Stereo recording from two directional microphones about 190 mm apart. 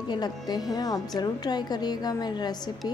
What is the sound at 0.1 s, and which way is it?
A woman's voice, 20° left (ahead or behind).